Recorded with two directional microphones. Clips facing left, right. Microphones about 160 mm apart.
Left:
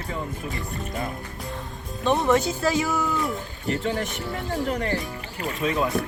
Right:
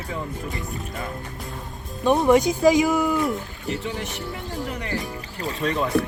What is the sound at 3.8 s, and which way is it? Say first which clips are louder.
Speech: left 4 dB; 50° left (ahead or behind).